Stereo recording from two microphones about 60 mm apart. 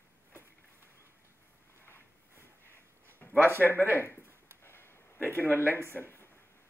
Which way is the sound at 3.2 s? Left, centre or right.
Left.